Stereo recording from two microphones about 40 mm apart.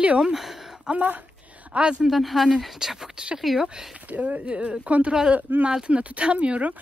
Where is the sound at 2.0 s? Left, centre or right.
Centre.